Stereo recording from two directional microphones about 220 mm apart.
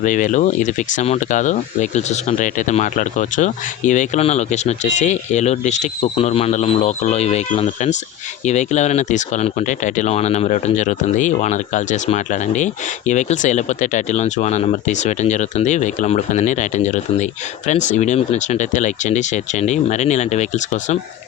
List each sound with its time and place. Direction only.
0.0 s speech: 35° left (ahead or behind)